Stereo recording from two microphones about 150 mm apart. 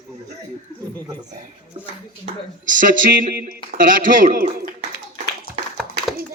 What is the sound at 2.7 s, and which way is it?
A man's voice, 60° right (ahead or behind).